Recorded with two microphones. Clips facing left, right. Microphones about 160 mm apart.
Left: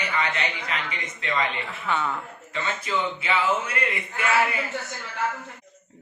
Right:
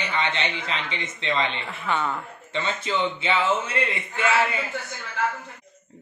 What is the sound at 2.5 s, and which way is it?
A man's voice, 25° right (ahead or behind).